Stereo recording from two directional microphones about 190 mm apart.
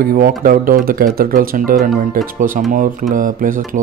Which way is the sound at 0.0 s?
50° right (ahead or behind).